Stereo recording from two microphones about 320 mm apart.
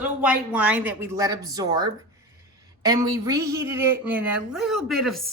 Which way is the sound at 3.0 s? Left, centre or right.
Centre.